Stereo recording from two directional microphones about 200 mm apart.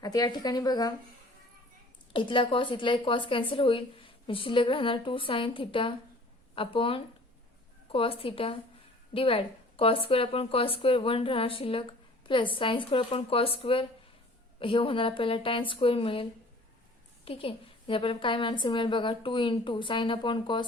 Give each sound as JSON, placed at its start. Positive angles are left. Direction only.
{"t": 0.0, "sound": "speech", "side_deg": 20}
{"t": 2.1, "sound": "a woman's voice", "side_deg": 25}
{"t": 17.2, "sound": "speech", "side_deg": 25}